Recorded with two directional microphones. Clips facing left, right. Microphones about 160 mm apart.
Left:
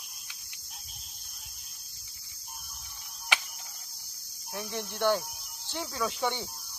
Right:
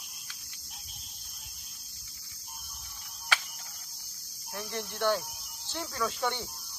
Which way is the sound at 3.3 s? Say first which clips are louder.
Even; 20° left (ahead or behind).